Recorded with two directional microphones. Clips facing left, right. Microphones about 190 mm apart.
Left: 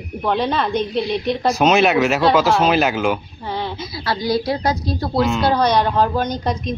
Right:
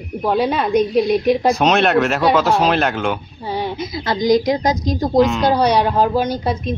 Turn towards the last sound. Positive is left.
turn(degrees=-10)  # may be behind; listen again after turning